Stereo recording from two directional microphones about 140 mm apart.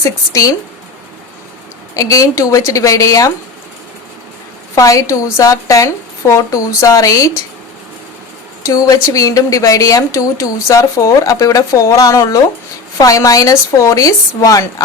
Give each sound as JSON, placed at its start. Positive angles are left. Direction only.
{"t": 0.0, "sound": "a woman's voice", "side_deg": 20}
{"t": 2.0, "sound": "a woman's voice", "side_deg": 25}
{"t": 4.7, "sound": "a woman's voice", "side_deg": 25}
{"t": 8.6, "sound": "a woman's voice", "side_deg": 25}